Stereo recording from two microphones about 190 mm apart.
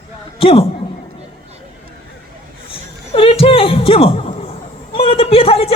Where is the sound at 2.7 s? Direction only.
30° left (ahead or behind).